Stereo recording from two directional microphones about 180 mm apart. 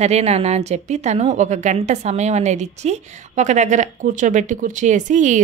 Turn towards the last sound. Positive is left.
turn(degrees=-40)  # may be behind; listen again after turning